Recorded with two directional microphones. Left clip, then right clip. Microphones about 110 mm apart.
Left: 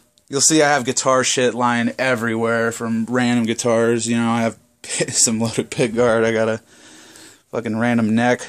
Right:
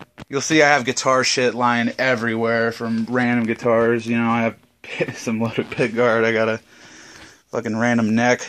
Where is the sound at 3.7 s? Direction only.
35° left (ahead or behind).